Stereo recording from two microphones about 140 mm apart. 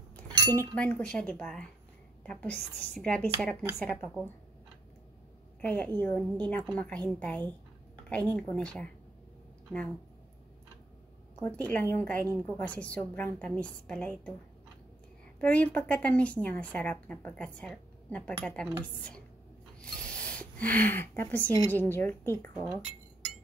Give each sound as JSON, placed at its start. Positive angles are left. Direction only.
{"t": 0.6, "sound": "speech", "side_deg": 10}
{"t": 5.6, "sound": "a woman's voice", "side_deg": 10}
{"t": 11.4, "sound": "speech", "side_deg": 10}
{"t": 15.4, "sound": "speech", "side_deg": 10}
{"t": 19.8, "sound": "a sound", "side_deg": 10}
{"t": 21.4, "sound": "a woman's voice", "side_deg": -20}
{"t": 21.7, "sound": "speech", "side_deg": 15}